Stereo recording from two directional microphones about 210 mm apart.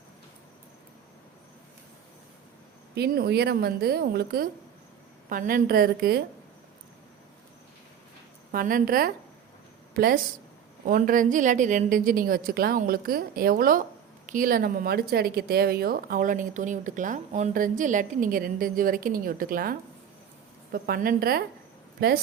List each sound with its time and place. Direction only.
2.9 s speech: 50° right (ahead or behind)
8.5 s a woman's voice: 40° right (ahead or behind)
20.7 s speech: 45° right (ahead or behind)